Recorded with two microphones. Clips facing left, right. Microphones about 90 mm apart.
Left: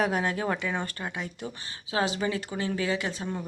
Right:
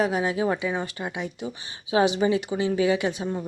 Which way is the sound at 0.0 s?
5° right (ahead or behind).